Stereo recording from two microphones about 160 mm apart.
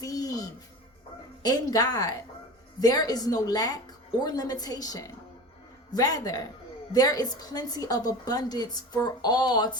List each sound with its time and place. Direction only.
0.0 s music: 20° left (ahead or behind)
1.4 s a woman's voice: 25° left (ahead or behind)